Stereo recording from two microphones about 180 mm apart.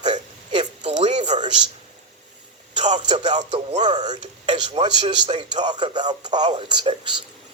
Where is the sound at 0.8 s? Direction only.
40° right (ahead or behind).